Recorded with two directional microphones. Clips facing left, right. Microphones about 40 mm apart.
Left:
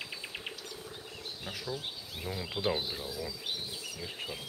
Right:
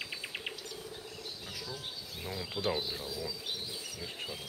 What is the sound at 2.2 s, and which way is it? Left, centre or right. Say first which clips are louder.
Speech: left 2 dB; centre.